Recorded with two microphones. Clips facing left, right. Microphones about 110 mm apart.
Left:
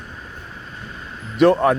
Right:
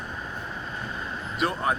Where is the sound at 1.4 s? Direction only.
80° left.